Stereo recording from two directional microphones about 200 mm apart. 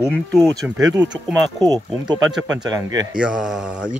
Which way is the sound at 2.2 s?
Centre (ahead or behind).